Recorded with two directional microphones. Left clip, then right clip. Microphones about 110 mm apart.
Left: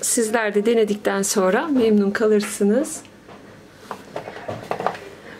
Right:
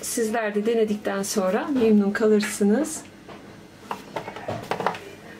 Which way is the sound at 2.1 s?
35° left (ahead or behind).